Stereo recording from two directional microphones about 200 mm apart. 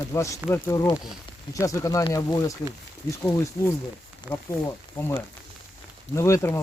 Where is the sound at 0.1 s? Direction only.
15° left (ahead or behind).